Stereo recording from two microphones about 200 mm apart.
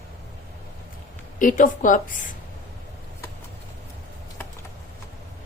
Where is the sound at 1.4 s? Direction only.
40° left (ahead or behind).